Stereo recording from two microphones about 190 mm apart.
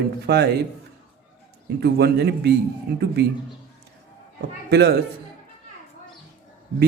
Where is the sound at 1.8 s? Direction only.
60° right (ahead or behind).